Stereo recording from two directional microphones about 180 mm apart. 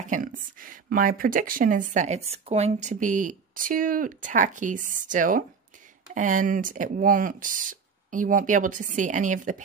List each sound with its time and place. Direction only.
0.0 s speech: 45° right (ahead or behind)